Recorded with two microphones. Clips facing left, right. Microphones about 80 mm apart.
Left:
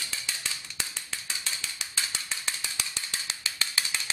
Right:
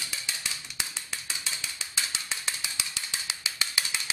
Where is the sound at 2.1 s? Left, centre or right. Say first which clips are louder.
Even; centre.